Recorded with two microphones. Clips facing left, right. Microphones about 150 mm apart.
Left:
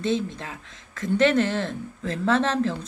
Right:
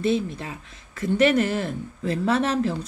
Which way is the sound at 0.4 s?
10° right (ahead or behind).